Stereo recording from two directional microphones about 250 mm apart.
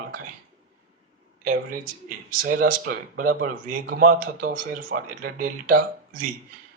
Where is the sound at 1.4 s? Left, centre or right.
Right.